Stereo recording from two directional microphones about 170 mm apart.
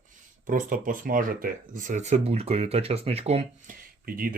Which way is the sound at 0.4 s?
50° right (ahead or behind).